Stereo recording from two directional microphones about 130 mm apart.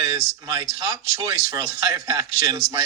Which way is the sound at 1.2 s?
25° right (ahead or behind).